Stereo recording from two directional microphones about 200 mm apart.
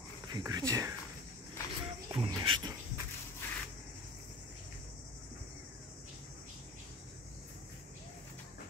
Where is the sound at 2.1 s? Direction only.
20° right (ahead or behind).